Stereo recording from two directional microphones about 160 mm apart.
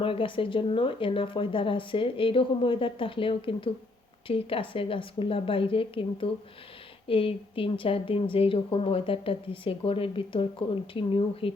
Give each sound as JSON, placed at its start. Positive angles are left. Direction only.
{"t": 0.0, "sound": "speech", "side_deg": 35}